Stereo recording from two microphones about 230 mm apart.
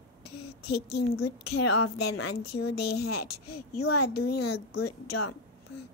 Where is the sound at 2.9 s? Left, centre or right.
Left.